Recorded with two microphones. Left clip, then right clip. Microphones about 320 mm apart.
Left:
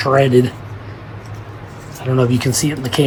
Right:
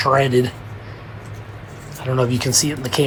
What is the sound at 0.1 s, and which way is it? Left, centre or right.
Speech, right.